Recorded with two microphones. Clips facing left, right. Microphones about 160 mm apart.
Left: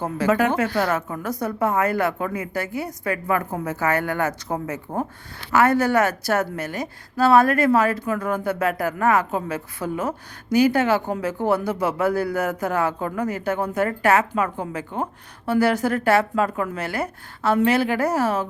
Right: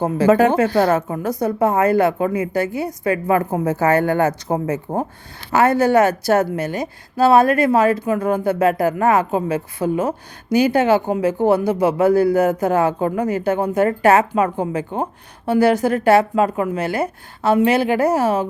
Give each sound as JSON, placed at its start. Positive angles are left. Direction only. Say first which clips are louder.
{"t": 0.0, "sound": "a woman's voice", "louder": "right 6 dB", "side_deg": -25}